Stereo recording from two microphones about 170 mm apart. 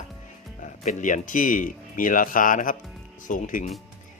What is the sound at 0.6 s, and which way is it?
Speech, 45° left (ahead or behind).